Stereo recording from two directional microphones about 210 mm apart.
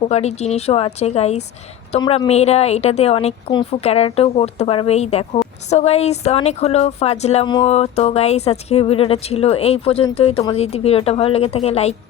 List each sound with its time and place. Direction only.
0.0 s a woman's voice: 30° left (ahead or behind)